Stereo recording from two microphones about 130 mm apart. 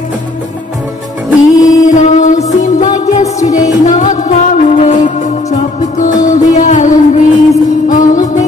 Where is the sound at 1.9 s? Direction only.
75° left (ahead or behind).